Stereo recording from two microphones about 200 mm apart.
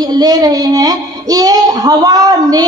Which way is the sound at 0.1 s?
20° right (ahead or behind).